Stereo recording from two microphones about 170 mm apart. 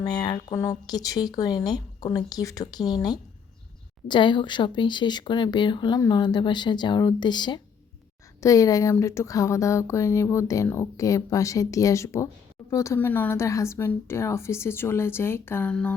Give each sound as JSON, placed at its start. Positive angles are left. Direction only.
{"t": 0.0, "sound": "speech", "side_deg": 25}